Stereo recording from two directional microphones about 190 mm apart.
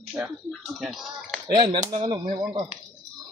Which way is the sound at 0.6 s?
Centre (ahead or behind).